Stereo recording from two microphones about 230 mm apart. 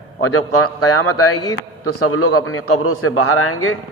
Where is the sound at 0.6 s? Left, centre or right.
Left.